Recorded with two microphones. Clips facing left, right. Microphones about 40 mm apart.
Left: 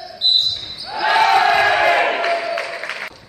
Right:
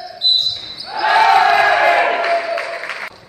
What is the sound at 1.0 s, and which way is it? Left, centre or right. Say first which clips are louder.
Crowd: right 3 dB; centre.